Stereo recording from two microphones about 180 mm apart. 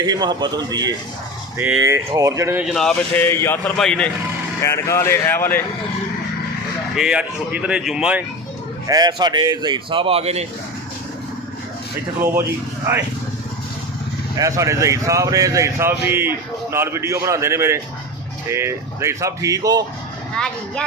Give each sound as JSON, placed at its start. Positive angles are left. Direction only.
{"t": 0.0, "sound": "a man's voice", "side_deg": -25}
{"t": 2.6, "sound": "speech", "side_deg": 5}
{"t": 3.2, "sound": "speech", "side_deg": 15}
{"t": 4.6, "sound": "speech", "side_deg": 15}
{"t": 6.9, "sound": "speech", "side_deg": -5}
{"t": 8.9, "sound": "a man's voice", "side_deg": -20}
{"t": 12.2, "sound": "speech", "side_deg": -15}
{"t": 14.3, "sound": "speech", "side_deg": -20}
{"t": 20.3, "sound": "speech", "side_deg": 5}